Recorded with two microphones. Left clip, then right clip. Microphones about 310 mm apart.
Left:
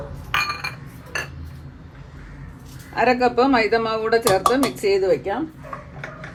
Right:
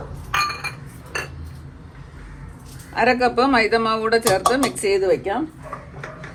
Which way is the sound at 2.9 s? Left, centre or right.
Right.